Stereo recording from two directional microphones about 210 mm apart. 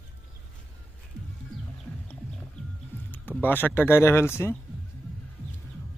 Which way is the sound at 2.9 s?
10° left (ahead or behind).